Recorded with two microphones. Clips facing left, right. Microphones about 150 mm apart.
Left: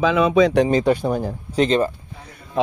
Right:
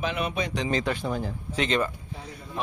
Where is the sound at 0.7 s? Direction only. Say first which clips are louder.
Left 9 dB; 35° left (ahead or behind).